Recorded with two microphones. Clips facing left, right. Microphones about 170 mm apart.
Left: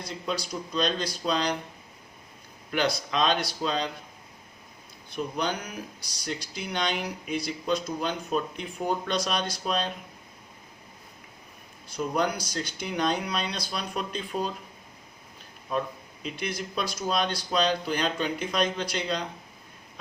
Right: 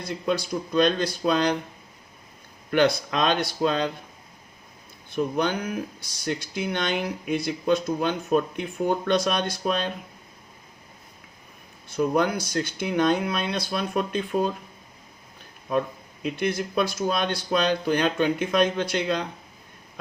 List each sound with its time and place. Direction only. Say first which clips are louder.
0.0 s speech: right 6 dB; 55° right (ahead or behind)
2.6 s speech: right 6 dB; 55° right (ahead or behind)
5.1 s speech: right 5 dB; 50° right (ahead or behind)
11.9 s speech: right 5 dB; 55° right (ahead or behind)
16.2 s speech: right 7 dB; 55° right (ahead or behind)